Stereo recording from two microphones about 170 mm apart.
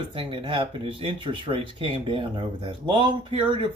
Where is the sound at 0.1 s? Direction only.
30° right (ahead or behind).